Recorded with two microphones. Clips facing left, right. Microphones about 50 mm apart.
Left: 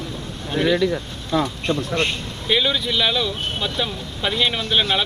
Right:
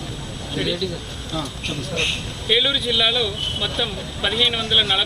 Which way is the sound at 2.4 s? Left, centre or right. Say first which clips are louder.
Even; centre.